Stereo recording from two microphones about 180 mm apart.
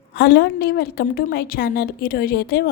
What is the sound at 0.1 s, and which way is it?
A woman's voice, 60° left (ahead or behind).